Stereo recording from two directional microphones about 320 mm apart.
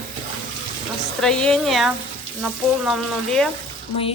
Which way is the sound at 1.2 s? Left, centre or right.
Centre.